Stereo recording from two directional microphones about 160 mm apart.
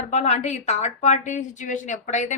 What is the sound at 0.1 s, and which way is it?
A woman's voice, 45° left (ahead or behind).